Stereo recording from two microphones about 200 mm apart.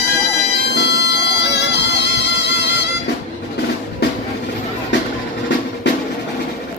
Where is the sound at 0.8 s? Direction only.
60° left (ahead or behind).